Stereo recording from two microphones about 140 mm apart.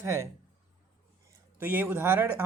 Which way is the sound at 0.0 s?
20° right (ahead or behind).